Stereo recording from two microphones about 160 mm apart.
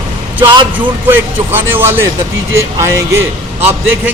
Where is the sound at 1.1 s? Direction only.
15° right (ahead or behind).